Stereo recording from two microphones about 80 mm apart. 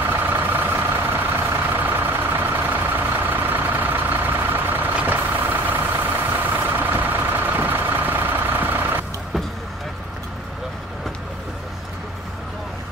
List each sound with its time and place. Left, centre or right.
0.1 s vehicle: right